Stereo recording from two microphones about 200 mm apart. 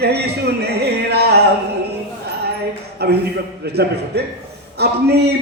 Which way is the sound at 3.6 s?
55° right (ahead or behind).